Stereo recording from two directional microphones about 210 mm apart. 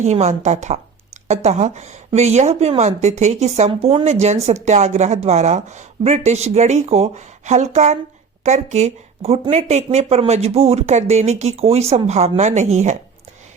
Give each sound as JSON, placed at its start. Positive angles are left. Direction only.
{"t": 0.0, "sound": "speech", "side_deg": -30}